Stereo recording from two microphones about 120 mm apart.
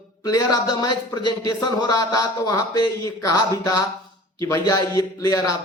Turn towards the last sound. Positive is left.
turn(degrees=30)  # may be behind; listen again after turning